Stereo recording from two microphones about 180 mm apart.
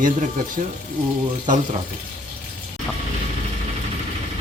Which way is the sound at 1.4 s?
45° right (ahead or behind).